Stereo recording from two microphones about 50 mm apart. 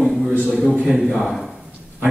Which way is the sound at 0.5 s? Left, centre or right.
Centre.